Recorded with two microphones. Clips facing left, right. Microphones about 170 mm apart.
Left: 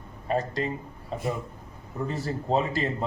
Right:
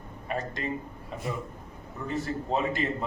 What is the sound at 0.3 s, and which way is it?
A man's voice, 35° left (ahead or behind).